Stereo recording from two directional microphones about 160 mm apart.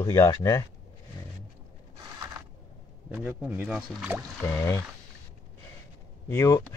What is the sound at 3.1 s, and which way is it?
Speech, 10° right (ahead or behind).